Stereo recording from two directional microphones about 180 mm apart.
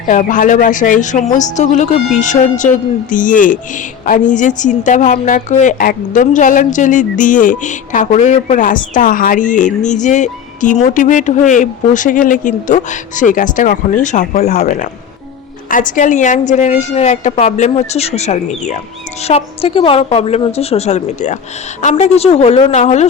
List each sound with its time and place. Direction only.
0.1 s a woman's voice: 45° left (ahead or behind)